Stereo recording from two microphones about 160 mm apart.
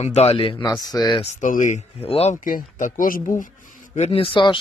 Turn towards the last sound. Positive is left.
turn(degrees=30)  # may be behind; listen again after turning